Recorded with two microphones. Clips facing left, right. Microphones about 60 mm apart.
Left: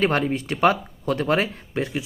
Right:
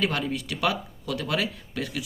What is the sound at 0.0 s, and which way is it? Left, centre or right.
Speech, left.